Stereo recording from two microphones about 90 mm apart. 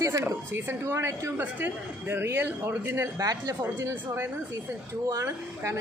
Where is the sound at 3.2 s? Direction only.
40° right (ahead or behind).